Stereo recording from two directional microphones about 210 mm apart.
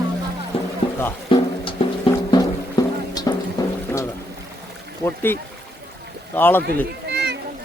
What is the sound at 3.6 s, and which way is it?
Water, 15° left (ahead or behind).